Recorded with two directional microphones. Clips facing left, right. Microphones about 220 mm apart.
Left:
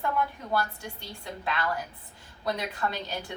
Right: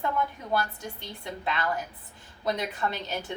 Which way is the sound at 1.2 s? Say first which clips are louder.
Right 1 dB; 20° right (ahead or behind).